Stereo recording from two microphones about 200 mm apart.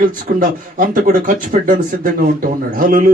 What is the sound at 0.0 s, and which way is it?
Speech, 45° right (ahead or behind).